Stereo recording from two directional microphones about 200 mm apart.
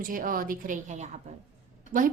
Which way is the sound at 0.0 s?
45° right (ahead or behind).